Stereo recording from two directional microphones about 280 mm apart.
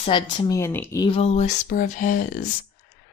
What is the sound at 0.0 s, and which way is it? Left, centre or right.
Speech, centre.